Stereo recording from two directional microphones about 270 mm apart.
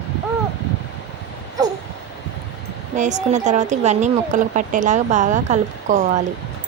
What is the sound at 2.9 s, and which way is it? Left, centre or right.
Speech, right.